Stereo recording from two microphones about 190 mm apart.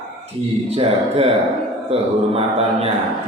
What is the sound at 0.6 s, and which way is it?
Speech, 30° right (ahead or behind).